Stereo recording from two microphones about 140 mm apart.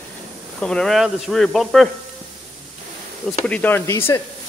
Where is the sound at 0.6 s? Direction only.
5° left (ahead or behind).